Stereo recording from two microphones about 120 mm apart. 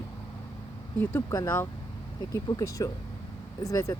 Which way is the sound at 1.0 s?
25° left (ahead or behind).